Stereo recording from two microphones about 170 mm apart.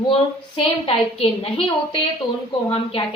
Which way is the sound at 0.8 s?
30° left (ahead or behind).